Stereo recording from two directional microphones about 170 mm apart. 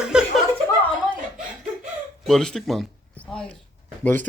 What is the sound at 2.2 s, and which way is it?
Speech, centre (ahead or behind).